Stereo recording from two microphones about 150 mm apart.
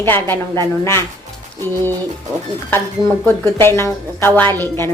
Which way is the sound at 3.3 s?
15° left (ahead or behind).